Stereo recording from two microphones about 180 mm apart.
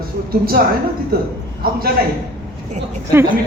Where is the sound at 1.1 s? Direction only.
55° right (ahead or behind).